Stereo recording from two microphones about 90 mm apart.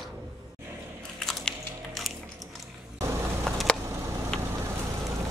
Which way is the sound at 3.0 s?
35° right (ahead or behind).